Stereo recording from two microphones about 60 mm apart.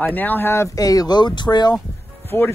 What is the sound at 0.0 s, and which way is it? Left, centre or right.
Speech, left.